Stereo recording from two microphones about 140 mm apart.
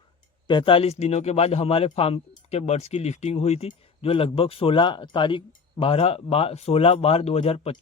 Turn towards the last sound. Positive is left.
turn(degrees=45)  # may be behind; listen again after turning